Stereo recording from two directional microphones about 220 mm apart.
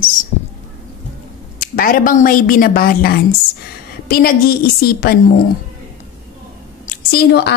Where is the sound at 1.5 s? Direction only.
40° left (ahead or behind).